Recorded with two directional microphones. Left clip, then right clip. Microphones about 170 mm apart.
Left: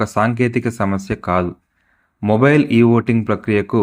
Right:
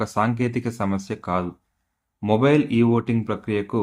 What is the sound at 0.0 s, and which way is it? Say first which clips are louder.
Speech: left 6 dB; 20° left (ahead or behind).